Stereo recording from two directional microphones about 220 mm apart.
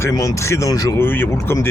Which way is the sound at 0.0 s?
15° left (ahead or behind).